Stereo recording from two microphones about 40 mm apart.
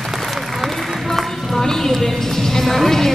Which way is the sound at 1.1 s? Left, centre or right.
Centre.